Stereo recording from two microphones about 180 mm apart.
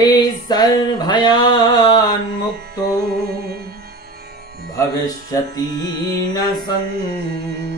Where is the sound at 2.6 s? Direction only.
60° right (ahead or behind).